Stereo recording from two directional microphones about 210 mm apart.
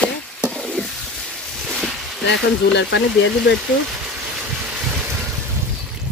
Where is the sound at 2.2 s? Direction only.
55° left (ahead or behind).